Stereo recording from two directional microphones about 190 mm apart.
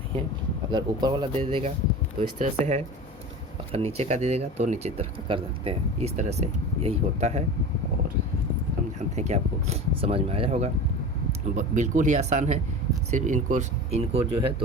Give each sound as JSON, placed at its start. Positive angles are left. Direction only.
{"t": 0.7, "sound": "speech", "side_deg": -20}
{"t": 2.4, "sound": "speech", "side_deg": -35}
{"t": 9.0, "sound": "speech", "side_deg": -35}